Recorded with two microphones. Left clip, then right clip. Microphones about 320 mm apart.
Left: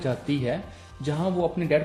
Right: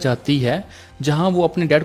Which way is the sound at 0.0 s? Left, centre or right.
Right.